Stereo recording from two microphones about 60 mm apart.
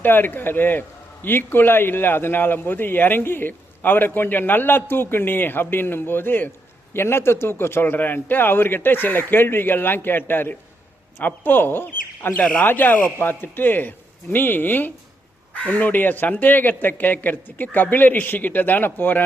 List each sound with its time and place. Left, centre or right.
0.0 s a man's voice: left